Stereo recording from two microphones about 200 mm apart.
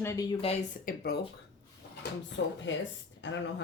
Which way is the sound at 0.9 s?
50° left (ahead or behind).